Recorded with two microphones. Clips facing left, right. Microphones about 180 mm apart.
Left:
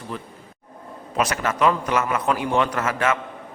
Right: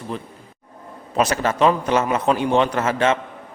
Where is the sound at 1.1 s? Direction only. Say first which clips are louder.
Right 4 dB; 30° right (ahead or behind).